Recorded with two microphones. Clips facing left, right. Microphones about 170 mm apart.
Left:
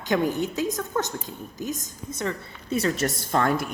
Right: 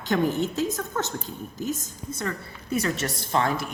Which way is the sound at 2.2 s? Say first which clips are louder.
Left 3 dB; 25° left (ahead or behind).